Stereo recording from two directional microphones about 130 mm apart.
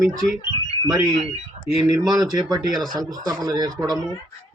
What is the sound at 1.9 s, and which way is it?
Speech, 30° right (ahead or behind).